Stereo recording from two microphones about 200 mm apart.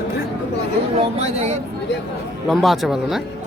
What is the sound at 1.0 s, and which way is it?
Speech, 30° right (ahead or behind).